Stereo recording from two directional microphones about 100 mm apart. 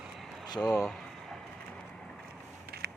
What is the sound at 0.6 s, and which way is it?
Speech, 20° left (ahead or behind).